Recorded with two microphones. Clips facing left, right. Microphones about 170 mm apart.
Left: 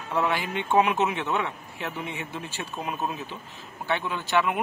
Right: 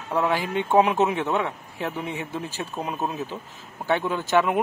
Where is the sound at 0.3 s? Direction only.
40° right (ahead or behind).